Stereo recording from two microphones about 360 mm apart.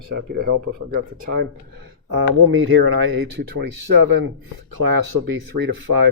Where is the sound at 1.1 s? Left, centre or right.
Right.